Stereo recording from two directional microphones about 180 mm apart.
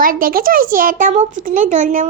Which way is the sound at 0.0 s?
50° right (ahead or behind).